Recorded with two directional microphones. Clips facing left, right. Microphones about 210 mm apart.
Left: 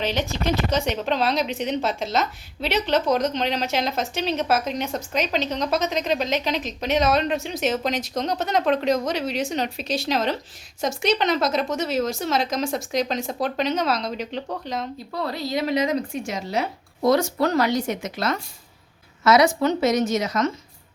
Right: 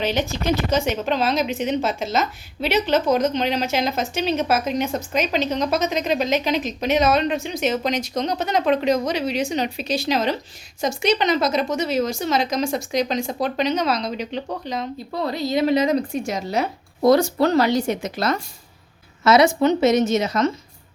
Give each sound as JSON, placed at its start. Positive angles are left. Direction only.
{"t": 0.7, "sound": "a woman's voice", "side_deg": 0}
{"t": 15.1, "sound": "a woman's voice", "side_deg": -20}